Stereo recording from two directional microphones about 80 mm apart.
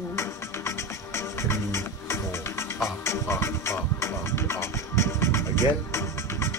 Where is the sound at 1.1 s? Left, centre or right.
Left.